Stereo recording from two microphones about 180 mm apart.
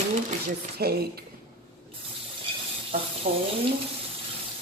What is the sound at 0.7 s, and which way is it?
Speech, 60° right (ahead or behind).